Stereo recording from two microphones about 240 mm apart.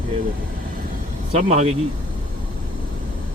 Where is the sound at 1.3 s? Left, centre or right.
Right.